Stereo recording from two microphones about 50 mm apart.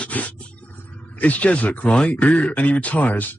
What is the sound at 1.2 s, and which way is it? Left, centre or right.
Speech, left.